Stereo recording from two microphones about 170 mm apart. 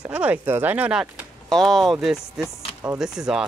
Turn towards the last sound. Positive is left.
turn(degrees=-5)  # may be behind; listen again after turning